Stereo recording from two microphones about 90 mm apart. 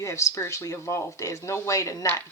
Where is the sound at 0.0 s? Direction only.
35° left (ahead or behind).